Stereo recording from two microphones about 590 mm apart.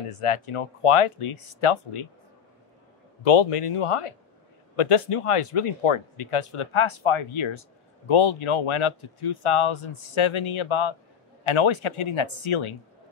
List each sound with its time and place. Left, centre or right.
0.1 s speech: left
3.3 s speech: left